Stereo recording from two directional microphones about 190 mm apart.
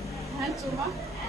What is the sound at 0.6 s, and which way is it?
Speech, 15° right (ahead or behind).